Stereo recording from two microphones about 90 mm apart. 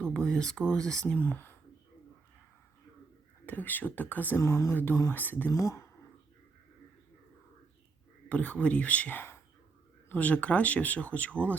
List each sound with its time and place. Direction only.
0.0 s speech: 10° left (ahead or behind)
1.0 s speech: 20° left (ahead or behind)
3.4 s speech: 20° left (ahead or behind)
4.4 s speech: 30° left (ahead or behind)
5.5 s speech: 35° left (ahead or behind)
8.3 s speech: 15° left (ahead or behind)